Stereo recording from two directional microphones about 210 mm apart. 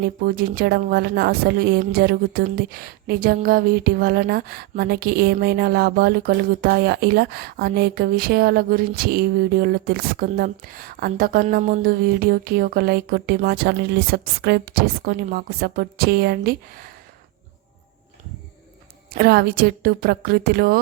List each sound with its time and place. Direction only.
0.0 s speech: 45° right (ahead or behind)
19.1 s speech: 45° right (ahead or behind)